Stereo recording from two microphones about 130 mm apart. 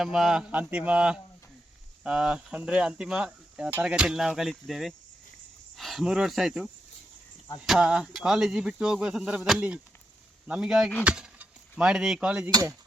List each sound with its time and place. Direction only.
0.0 s speech: 5° right (ahead or behind)
7.7 s speech: 5° right (ahead or behind)
11.0 s keys jangling: 10° right (ahead or behind)
11.8 s speech: 5° right (ahead or behind)
12.5 s speech: 30° right (ahead or behind)